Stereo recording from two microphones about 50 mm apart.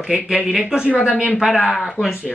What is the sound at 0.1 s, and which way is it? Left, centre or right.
Speech, right.